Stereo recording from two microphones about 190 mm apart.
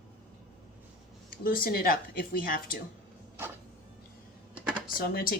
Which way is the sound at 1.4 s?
50° left (ahead or behind).